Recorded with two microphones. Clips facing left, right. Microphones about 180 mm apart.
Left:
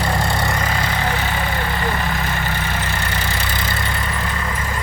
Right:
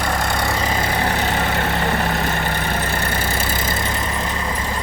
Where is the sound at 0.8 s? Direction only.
35° right (ahead or behind).